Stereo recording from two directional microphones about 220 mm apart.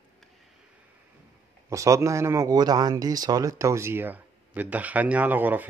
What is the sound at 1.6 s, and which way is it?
Speech, 15° right (ahead or behind).